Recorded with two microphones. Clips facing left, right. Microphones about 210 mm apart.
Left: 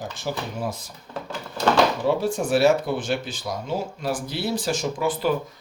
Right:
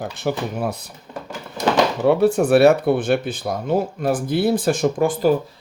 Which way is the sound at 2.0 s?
65° right (ahead or behind).